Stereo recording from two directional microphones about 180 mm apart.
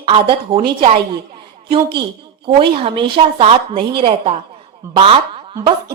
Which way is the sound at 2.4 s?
30° right (ahead or behind).